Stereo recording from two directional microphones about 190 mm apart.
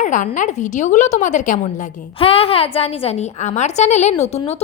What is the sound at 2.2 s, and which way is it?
A woman's voice, 30° left (ahead or behind).